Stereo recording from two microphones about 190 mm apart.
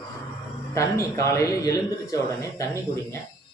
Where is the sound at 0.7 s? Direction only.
15° left (ahead or behind).